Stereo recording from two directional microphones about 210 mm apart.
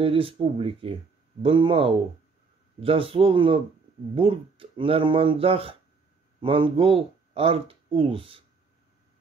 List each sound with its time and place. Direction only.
0.0 s speech: 25° right (ahead or behind)